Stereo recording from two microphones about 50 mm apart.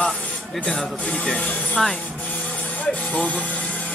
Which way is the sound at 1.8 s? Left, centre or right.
Centre.